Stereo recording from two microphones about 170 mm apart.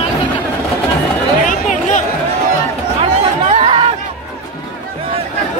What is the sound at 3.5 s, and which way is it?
Chatter, 35° right (ahead or behind).